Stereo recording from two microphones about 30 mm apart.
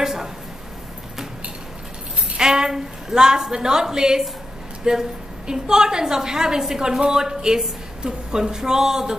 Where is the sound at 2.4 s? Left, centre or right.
Right.